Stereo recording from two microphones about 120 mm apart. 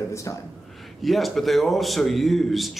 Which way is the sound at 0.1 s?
25° left (ahead or behind).